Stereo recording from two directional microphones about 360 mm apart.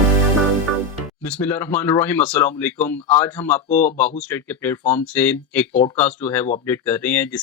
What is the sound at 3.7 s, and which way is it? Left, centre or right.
Speech, left.